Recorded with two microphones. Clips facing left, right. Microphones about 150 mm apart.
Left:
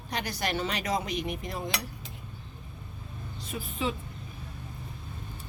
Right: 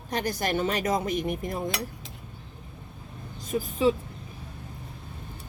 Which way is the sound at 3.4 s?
40° right (ahead or behind).